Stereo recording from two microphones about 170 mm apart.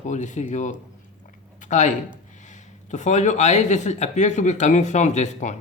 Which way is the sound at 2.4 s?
45° left (ahead or behind).